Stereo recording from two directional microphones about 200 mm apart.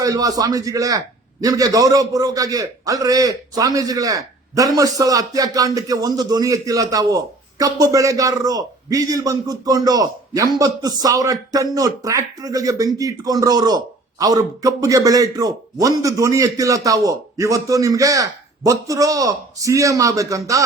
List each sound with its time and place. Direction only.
0.0 s speech: 15° right (ahead or behind)